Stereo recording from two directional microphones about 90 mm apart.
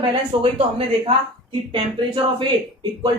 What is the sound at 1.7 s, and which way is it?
Speech, 65° right (ahead or behind).